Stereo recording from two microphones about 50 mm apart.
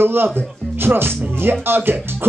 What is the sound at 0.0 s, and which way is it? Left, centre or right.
Speech, right.